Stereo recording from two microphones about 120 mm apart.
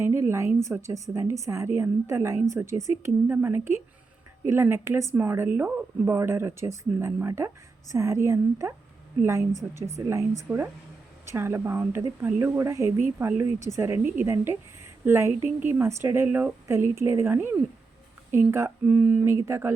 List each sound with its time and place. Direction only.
0.0 s speech: 20° right (ahead or behind)